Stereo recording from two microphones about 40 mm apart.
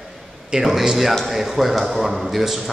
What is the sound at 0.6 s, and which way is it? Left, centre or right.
A man's voice, centre.